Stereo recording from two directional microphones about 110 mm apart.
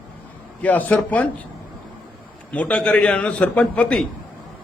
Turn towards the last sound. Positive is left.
turn(degrees=10)  # may be behind; listen again after turning